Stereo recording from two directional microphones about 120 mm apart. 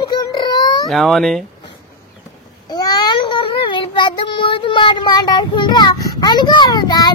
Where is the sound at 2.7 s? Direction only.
35° left (ahead or behind).